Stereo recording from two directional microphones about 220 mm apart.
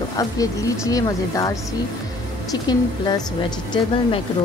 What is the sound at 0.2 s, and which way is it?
A woman's voice, 15° left (ahead or behind).